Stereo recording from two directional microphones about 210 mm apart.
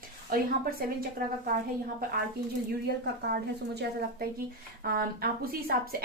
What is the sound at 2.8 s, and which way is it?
A woman's voice, 50° right (ahead or behind).